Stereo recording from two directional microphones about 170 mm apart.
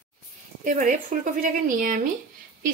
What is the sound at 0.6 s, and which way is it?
Speech, 50° right (ahead or behind).